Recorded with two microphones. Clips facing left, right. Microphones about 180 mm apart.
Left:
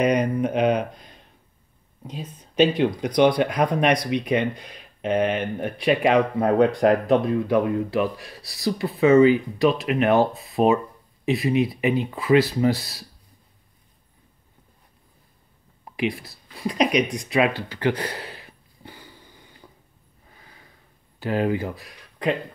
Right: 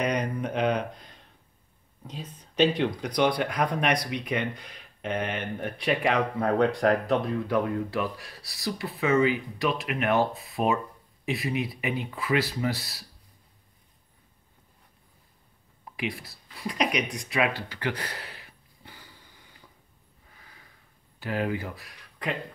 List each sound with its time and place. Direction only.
0.0 s a sound: 15° left (ahead or behind)
2.0 s speech: 15° left (ahead or behind)
16.0 s speech: 20° left (ahead or behind)
17.6 s a sound: 25° left (ahead or behind)
20.3 s gasp: 30° left (ahead or behind)
21.2 s speech: 30° left (ahead or behind)